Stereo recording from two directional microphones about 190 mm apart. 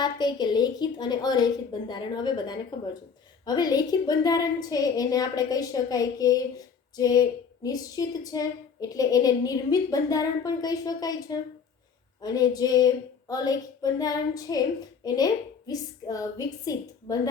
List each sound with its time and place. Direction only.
0.0 s a woman's voice: 20° left (ahead or behind)